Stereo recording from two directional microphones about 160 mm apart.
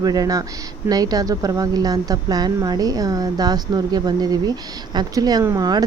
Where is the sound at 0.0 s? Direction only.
25° right (ahead or behind).